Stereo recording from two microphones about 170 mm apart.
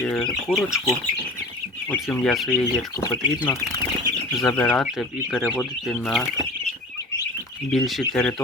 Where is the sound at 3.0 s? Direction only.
20° left (ahead or behind); by 6.2 s centre (ahead or behind).